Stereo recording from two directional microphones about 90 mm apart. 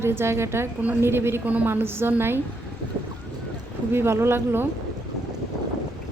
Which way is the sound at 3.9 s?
25° right (ahead or behind).